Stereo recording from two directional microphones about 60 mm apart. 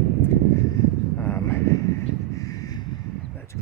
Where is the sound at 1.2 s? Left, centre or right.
Left.